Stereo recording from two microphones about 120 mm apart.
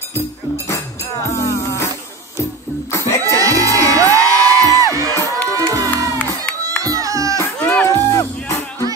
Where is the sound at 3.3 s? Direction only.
25° right (ahead or behind).